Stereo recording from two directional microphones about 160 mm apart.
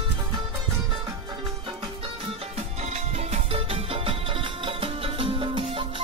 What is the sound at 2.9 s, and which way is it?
Music, 35° right (ahead or behind).